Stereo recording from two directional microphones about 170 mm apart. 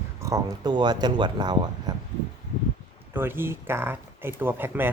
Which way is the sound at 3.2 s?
10° right (ahead or behind).